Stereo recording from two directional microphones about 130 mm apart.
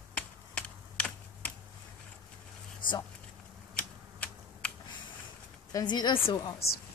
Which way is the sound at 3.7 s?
10° left (ahead or behind).